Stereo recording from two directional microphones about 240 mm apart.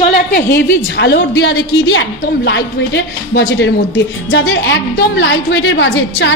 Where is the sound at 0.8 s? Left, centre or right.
Left.